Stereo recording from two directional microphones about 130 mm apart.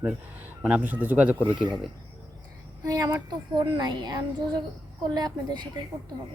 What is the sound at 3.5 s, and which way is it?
A woman's voice, 35° right (ahead or behind).